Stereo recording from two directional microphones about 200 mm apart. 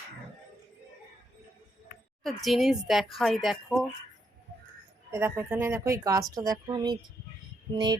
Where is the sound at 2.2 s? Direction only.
Centre (ahead or behind).